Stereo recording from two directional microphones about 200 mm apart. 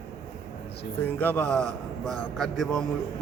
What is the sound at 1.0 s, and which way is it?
A man's voice, 10° left (ahead or behind).